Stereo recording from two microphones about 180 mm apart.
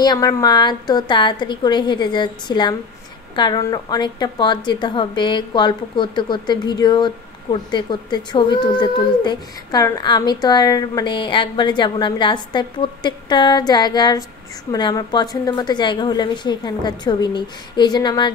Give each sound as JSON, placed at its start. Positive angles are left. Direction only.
{"t": 0.0, "sound": "speech", "side_deg": 20}